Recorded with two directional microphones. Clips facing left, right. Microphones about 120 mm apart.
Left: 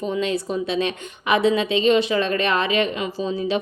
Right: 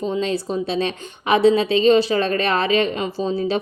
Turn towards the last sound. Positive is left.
turn(degrees=-35)  # may be behind; listen again after turning